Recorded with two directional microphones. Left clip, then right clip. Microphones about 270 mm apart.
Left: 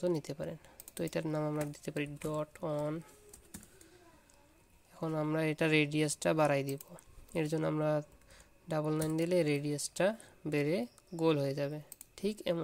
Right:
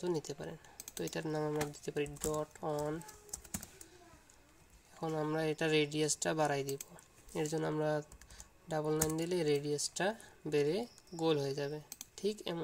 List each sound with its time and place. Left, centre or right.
0.0 s speech: left
5.0 s speech: left